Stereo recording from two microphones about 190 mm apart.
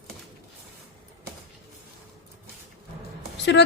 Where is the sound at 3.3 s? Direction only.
65° left (ahead or behind).